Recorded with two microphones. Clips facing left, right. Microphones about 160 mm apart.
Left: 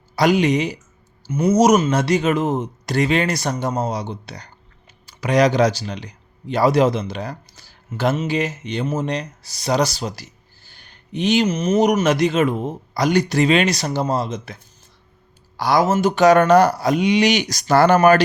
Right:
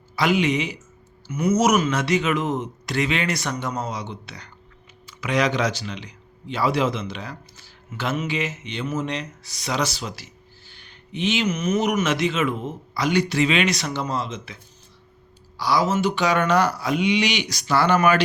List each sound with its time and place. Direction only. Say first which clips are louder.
0.2 s speech: left 4 dB; 40° left (ahead or behind)